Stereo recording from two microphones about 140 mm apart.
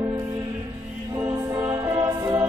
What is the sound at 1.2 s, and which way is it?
Music, 20° right (ahead or behind).